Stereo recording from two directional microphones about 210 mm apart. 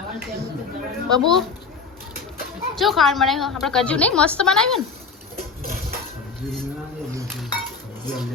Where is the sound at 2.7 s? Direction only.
Centre (ahead or behind).